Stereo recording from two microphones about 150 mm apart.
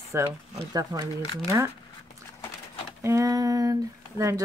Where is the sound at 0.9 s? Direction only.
30° right (ahead or behind).